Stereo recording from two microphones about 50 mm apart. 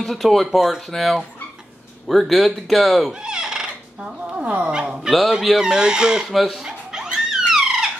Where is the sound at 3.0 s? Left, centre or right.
Centre.